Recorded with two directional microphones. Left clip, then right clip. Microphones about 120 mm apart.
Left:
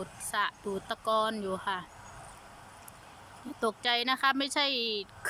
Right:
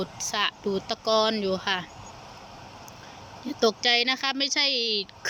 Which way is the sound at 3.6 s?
Centre (ahead or behind).